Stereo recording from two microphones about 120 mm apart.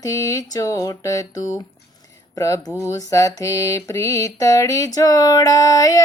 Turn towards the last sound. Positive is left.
turn(degrees=30)  # may be behind; listen again after turning